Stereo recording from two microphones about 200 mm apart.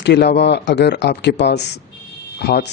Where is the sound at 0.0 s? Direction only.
55° left (ahead or behind).